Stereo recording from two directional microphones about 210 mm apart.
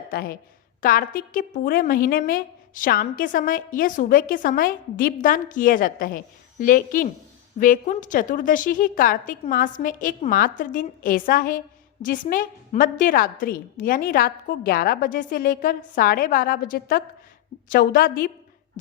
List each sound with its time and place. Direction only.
0.1 s a woman's voice: 45° left (ahead or behind)